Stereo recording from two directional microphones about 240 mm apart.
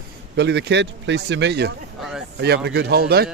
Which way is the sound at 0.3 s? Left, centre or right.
Right.